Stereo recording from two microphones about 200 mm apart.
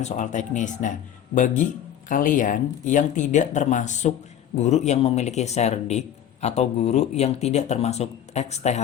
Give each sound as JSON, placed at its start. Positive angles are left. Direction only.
{"t": 0.0, "sound": "speech", "side_deg": 40}